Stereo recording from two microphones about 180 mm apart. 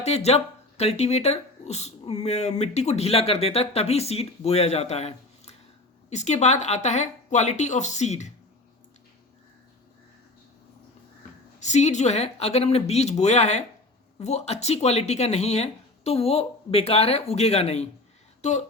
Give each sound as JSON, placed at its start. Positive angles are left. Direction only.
{"t": 0.0, "sound": "speech", "side_deg": 35}
{"t": 11.6, "sound": "speech", "side_deg": 40}